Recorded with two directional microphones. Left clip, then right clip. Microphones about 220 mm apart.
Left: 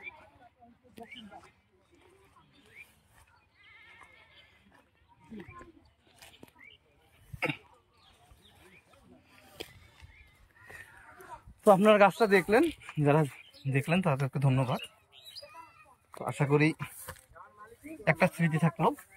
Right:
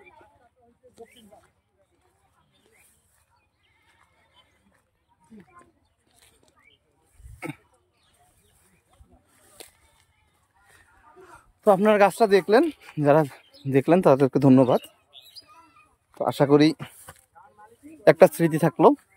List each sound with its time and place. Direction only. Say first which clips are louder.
11.3 s speech: right 3 dB; 15° right (ahead or behind)